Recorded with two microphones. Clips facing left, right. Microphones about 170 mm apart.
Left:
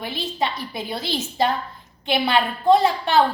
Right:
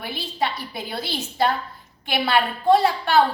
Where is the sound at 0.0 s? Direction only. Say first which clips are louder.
Left 1 dB; 25° left (ahead or behind).